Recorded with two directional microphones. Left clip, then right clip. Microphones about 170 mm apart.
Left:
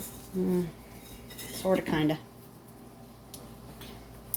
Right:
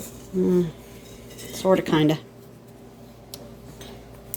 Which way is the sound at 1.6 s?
50° right (ahead or behind).